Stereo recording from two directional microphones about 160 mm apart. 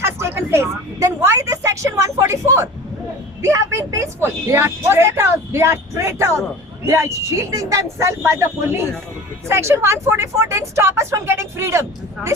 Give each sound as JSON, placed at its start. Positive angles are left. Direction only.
{"t": 0.0, "sound": "a woman's voice", "side_deg": -15}